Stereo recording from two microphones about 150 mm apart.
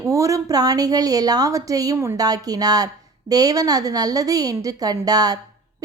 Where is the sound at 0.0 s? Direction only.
20° right (ahead or behind).